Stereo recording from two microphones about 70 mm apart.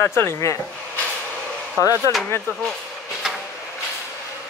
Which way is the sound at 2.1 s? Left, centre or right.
Left.